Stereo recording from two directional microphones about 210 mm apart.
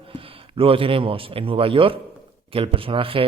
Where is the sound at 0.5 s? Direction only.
25° right (ahead or behind).